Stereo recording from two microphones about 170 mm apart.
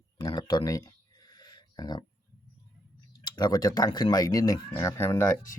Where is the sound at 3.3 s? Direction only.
25° left (ahead or behind).